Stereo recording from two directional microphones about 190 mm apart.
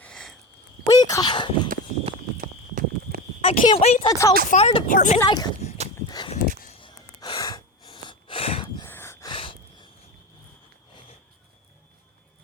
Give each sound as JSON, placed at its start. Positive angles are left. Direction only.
{"t": 0.0, "sound": "a sound", "side_deg": 5}
{"t": 0.9, "sound": "speech", "side_deg": 20}
{"t": 2.4, "sound": "clip-clop", "side_deg": -45}
{"t": 3.4, "sound": "speech", "side_deg": 30}
{"t": 4.1, "sound": "speech", "side_deg": 15}
{"t": 4.4, "sound": "speech", "side_deg": 35}
{"t": 4.9, "sound": "speech", "side_deg": 45}
{"t": 5.2, "sound": "speech", "side_deg": 20}
{"t": 6.1, "sound": "a sound", "side_deg": 25}
{"t": 6.7, "sound": "wheeze", "side_deg": 25}
{"t": 8.9, "sound": "gasp", "side_deg": 15}
{"t": 9.3, "sound": "a sound", "side_deg": 25}